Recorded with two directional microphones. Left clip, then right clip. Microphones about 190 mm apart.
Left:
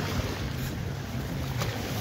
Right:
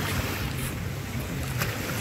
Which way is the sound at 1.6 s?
40° right (ahead or behind).